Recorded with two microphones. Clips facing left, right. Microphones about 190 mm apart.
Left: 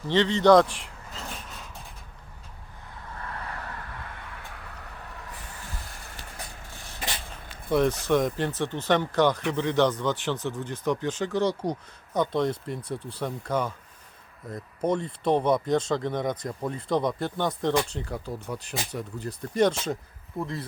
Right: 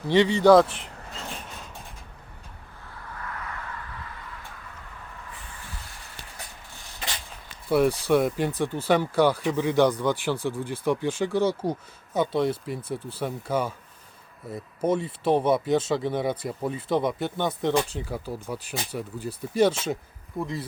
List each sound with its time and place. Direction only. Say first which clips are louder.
0.1 s speech: right 2 dB; 10° right (ahead or behind)
3.2 s vehicle: even; 35° left (ahead or behind)
7.7 s speech: right 2 dB; 10° right (ahead or behind)